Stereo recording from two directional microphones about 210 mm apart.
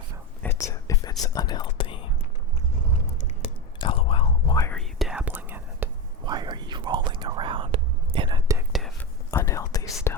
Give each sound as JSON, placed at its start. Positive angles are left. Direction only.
{"t": 0.4, "sound": "whispering", "side_deg": 15}
{"t": 3.4, "sound": "whispering", "side_deg": 25}
{"t": 4.7, "sound": "whispering", "side_deg": 0}
{"t": 6.2, "sound": "whispering", "side_deg": -20}
{"t": 8.7, "sound": "whispering", "side_deg": 0}
{"t": 9.3, "sound": "whispering", "side_deg": 15}